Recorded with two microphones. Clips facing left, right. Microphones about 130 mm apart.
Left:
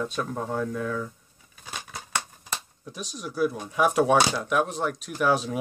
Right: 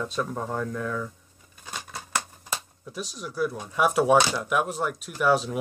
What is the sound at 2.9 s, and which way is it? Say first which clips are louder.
Speech: even; centre (ahead or behind).